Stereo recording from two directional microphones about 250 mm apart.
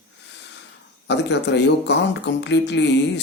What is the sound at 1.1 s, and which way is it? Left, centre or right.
Speech, left.